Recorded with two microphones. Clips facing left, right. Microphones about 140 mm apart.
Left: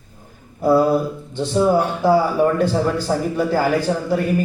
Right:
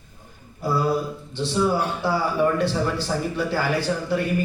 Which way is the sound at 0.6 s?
50° left (ahead or behind).